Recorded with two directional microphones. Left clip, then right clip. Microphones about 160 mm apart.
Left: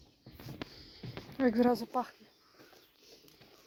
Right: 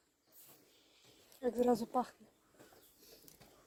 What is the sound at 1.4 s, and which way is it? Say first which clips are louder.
Speech: left 4 dB; 20° right (ahead or behind).